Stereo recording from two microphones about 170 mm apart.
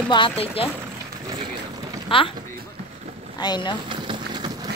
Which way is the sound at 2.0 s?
30° left (ahead or behind).